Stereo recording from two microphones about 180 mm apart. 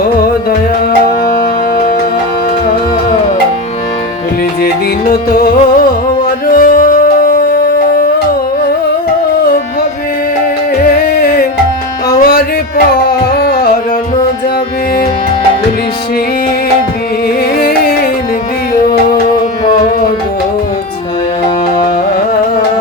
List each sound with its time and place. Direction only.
4.6 s music: 55° left (ahead or behind)
10.8 s music: 55° left (ahead or behind)
17.6 s music: 60° left (ahead or behind)